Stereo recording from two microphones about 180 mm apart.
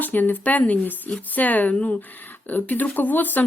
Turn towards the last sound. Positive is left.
turn(degrees=10)  # may be behind; listen again after turning